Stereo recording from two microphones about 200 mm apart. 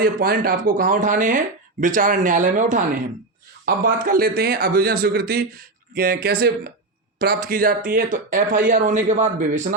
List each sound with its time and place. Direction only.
0.0 s speech: 45° right (ahead or behind)